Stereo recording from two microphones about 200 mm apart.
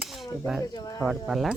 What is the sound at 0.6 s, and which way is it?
Speech, 20° left (ahead or behind).